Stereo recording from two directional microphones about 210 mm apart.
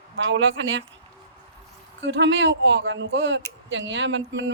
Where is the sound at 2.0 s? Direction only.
60° right (ahead or behind).